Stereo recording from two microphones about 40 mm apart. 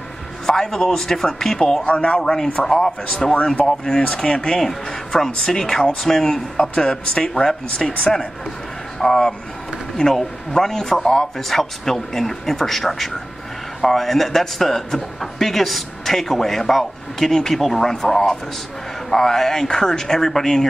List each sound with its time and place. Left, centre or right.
0.5 s a man's voice: centre
1.9 s speech: left
2.3 s a man's voice: centre
4.6 s a man's voice: centre
6.5 s a man's voice: left